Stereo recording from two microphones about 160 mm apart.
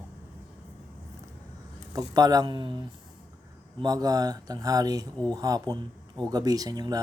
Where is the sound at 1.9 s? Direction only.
25° right (ahead or behind).